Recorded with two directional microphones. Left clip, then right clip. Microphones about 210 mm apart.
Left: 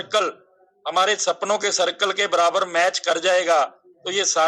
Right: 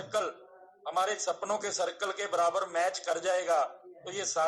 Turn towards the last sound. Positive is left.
turn(degrees=35)  # may be behind; listen again after turning